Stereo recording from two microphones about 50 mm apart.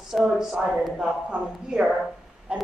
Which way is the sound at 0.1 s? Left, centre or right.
Centre.